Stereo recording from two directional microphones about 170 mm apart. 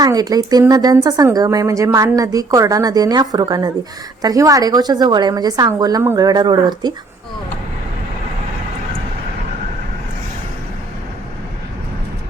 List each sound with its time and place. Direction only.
0.0 s speech: 20° right (ahead or behind)